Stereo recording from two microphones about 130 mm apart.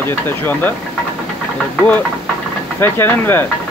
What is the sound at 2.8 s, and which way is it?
Speech, 15° left (ahead or behind).